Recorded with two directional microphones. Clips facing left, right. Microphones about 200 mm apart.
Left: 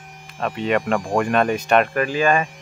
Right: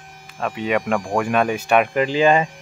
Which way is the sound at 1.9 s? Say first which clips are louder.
Right 3 dB; 20° right (ahead or behind).